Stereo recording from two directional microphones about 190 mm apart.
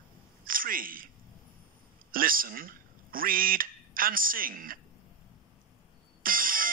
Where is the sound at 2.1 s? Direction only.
50° right (ahead or behind).